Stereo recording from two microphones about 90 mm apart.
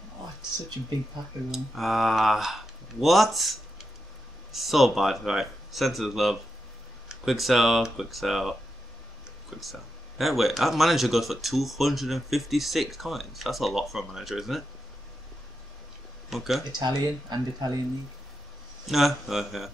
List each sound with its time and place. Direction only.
1.5 s speech: centre (ahead or behind)
16.3 s speech: centre (ahead or behind)
16.7 s speech: 50° right (ahead or behind)
18.9 s speech: centre (ahead or behind)